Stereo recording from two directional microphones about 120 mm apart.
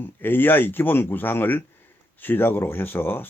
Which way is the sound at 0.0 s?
15° left (ahead or behind).